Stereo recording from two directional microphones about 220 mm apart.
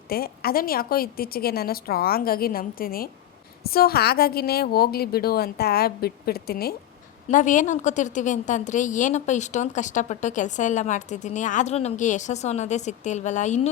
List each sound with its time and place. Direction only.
0.1 s a woman's voice: 45° left (ahead or behind)